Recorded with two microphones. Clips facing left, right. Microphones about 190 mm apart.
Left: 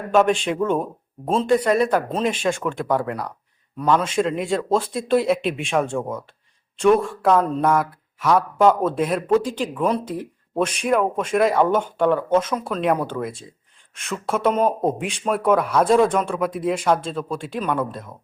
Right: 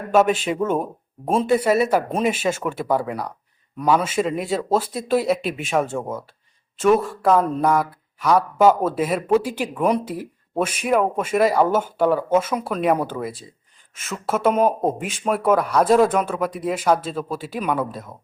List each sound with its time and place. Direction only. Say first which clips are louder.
0.1 s speech: even; 5° right (ahead or behind)